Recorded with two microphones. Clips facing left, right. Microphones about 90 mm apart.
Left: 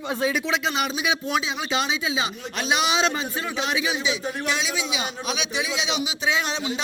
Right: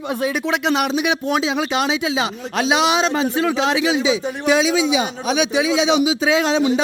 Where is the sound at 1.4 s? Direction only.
90° right.